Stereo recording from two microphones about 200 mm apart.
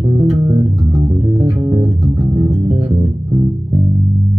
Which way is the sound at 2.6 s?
30° right (ahead or behind).